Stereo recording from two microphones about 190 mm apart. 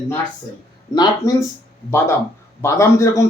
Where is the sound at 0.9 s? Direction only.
20° left (ahead or behind).